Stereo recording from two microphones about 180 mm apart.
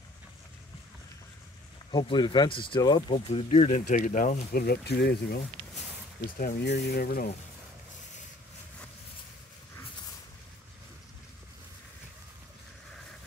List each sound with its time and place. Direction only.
1.9 s speech: 25° left (ahead or behind); by 5.4 s 65° left (ahead or behind)
6.3 s speech: 55° left (ahead or behind)